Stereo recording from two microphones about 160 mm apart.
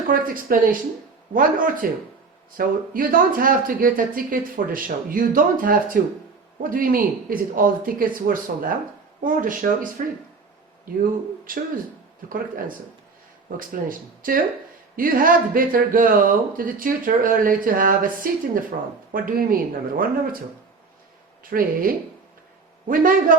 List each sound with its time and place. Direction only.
0.1 s speech: 60° right (ahead or behind)
11.5 s speech: 60° right (ahead or behind)
21.4 s speech: 60° right (ahead or behind)